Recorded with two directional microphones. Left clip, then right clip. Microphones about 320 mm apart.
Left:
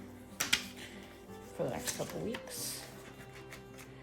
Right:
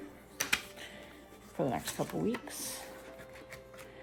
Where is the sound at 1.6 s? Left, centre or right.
Right.